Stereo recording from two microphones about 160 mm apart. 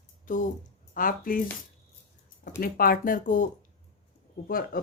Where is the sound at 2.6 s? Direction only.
65° left (ahead or behind).